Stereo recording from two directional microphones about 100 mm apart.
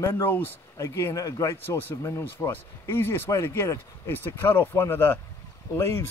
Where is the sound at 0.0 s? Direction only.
30° left (ahead or behind).